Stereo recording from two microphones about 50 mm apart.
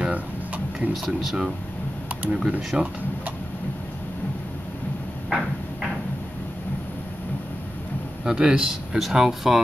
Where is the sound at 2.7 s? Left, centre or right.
Right.